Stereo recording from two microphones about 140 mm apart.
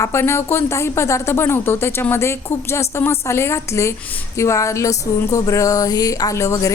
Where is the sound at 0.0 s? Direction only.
20° left (ahead or behind).